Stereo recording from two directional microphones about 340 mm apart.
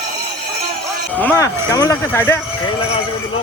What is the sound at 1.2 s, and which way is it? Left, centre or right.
Speech, centre.